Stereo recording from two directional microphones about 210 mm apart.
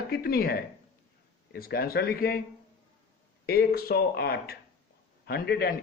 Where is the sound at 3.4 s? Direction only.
45° left (ahead or behind).